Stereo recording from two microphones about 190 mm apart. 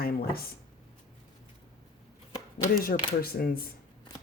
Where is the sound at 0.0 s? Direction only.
50° left (ahead or behind).